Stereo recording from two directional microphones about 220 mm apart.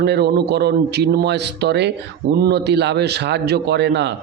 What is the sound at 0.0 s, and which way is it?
A man's voice, 50° right (ahead or behind).